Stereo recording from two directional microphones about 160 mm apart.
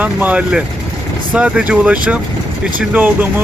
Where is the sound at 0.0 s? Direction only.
10° right (ahead or behind).